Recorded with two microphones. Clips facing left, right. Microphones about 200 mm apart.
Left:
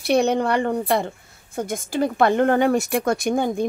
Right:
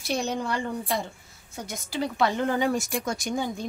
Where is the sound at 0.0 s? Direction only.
65° left (ahead or behind).